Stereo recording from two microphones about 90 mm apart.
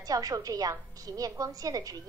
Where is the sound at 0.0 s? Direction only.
40° right (ahead or behind).